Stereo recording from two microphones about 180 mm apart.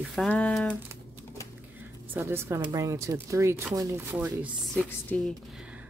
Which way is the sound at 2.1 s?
15° right (ahead or behind).